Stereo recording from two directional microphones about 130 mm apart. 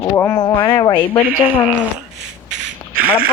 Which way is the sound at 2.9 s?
90° right.